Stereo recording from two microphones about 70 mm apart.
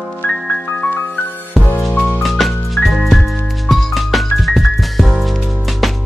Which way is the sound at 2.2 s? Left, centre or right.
Centre.